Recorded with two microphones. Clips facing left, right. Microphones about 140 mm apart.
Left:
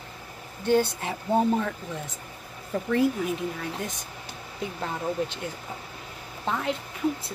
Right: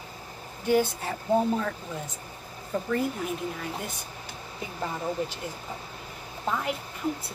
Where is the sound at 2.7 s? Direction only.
Centre (ahead or behind).